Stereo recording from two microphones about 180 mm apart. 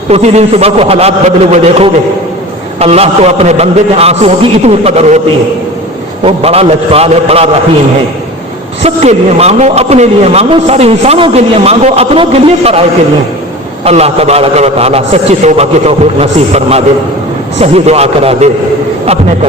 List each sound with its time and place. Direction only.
0.1 s a man's voice: 35° right (ahead or behind)
6.2 s a man's voice: 35° right (ahead or behind)
8.8 s a man's voice: 35° right (ahead or behind)
13.8 s a man's voice: 35° right (ahead or behind)